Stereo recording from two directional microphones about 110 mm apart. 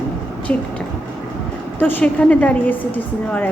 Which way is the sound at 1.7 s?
20° left (ahead or behind).